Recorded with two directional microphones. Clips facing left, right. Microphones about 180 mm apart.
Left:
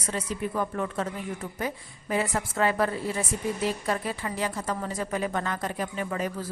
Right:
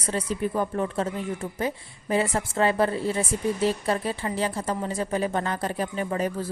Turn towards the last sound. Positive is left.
turn(degrees=-35)  # may be behind; listen again after turning